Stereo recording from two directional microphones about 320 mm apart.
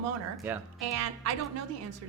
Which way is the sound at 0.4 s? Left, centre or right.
Centre.